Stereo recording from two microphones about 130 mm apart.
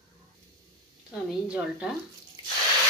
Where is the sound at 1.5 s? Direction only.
10° right (ahead or behind).